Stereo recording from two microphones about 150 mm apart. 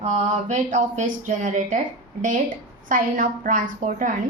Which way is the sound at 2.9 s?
65° right (ahead or behind).